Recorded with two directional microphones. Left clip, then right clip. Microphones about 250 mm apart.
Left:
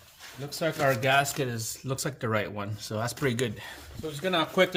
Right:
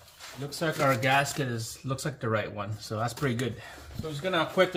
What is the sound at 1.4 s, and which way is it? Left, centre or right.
Speech, left.